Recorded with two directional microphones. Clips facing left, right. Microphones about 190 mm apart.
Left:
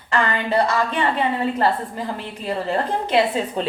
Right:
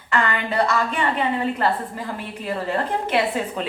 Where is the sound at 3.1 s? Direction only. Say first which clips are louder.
Left 4 dB; 25° left (ahead or behind).